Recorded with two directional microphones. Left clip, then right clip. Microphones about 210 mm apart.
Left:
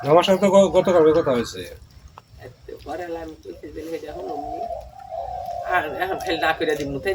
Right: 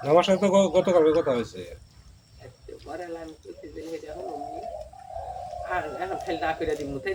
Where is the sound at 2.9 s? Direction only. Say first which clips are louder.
Left 6 dB; 45° left (ahead or behind).